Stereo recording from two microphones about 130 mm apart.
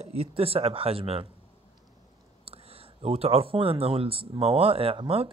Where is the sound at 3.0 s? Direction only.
50° right (ahead or behind).